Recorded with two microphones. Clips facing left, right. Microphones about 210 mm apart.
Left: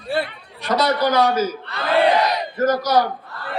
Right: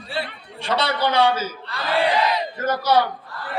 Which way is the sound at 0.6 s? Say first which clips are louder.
Left 4 dB; 30° right (ahead or behind).